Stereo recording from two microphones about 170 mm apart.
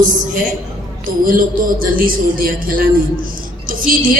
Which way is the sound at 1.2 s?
55° right (ahead or behind).